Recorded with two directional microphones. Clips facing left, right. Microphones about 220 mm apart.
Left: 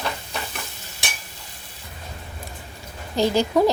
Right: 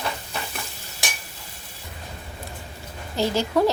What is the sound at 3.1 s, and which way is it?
Stir, 15° left (ahead or behind).